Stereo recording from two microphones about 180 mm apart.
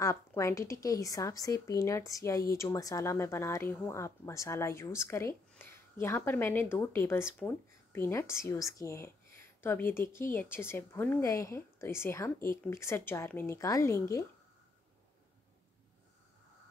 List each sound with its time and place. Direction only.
0.0 s speech: 15° left (ahead or behind)